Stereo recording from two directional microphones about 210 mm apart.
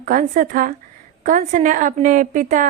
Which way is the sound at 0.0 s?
40° right (ahead or behind).